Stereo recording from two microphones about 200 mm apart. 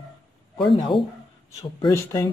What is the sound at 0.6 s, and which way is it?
Speech, 25° left (ahead or behind).